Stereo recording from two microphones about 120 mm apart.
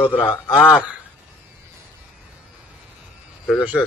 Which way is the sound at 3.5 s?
15° left (ahead or behind).